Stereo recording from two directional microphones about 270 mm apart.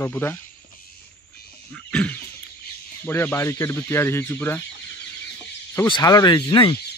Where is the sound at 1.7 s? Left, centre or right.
Centre.